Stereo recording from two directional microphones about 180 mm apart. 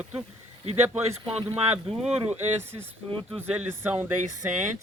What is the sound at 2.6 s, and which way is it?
Speech, 15° right (ahead or behind).